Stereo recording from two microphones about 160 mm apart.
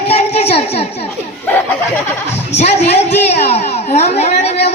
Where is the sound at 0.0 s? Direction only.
40° left (ahead or behind).